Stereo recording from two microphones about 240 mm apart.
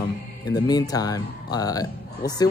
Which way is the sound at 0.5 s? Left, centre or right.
Centre.